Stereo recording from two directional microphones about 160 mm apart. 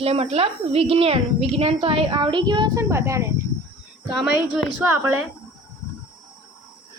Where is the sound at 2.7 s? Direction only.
15° right (ahead or behind).